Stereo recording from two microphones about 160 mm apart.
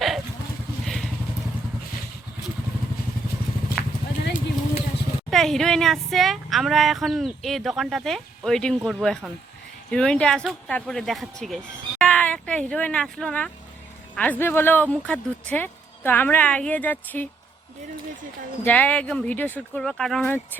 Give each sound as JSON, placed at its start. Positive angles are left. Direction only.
{"t": 0.9, "sound": "vehicle", "side_deg": 0}
{"t": 4.2, "sound": "vehicle", "side_deg": 80}
{"t": 5.3, "sound": "speech", "side_deg": 0}
{"t": 18.6, "sound": "speech", "side_deg": 10}